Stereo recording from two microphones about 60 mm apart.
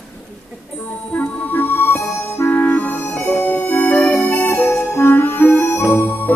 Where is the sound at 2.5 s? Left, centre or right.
Left.